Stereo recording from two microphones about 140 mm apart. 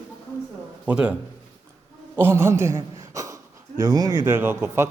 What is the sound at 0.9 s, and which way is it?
Speech, 10° right (ahead or behind).